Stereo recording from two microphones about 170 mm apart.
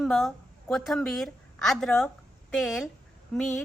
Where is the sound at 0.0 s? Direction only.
Centre (ahead or behind).